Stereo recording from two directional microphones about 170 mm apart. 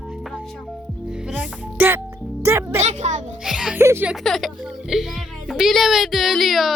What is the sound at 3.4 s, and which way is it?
Speech, 5° right (ahead or behind).